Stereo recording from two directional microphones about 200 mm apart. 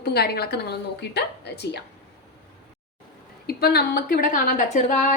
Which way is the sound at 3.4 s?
50° left (ahead or behind).